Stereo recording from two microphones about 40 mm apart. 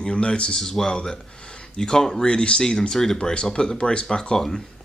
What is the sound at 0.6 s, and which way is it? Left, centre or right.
Speech, centre.